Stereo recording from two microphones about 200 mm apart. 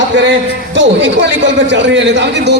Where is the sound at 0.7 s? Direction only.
65° right (ahead or behind).